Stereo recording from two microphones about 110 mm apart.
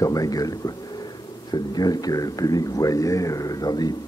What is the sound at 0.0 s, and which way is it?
Speech, 35° left (ahead or behind).